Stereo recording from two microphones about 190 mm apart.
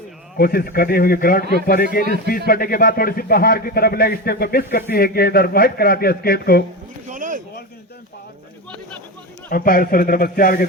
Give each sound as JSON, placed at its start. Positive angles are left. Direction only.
{"t": 0.3, "sound": "a man's voice", "side_deg": 50}
{"t": 7.1, "sound": "a sound", "side_deg": -45}
{"t": 9.5, "sound": "a man's voice", "side_deg": 50}